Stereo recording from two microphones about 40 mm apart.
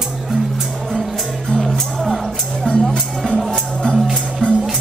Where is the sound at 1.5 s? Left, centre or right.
Centre.